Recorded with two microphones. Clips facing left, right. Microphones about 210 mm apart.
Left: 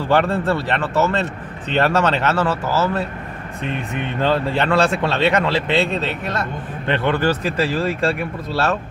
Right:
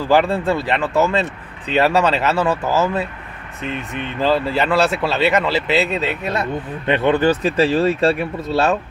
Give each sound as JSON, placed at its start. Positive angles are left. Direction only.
{"t": 0.1, "sound": "speech", "side_deg": -10}
{"t": 3.6, "sound": "speech", "side_deg": 0}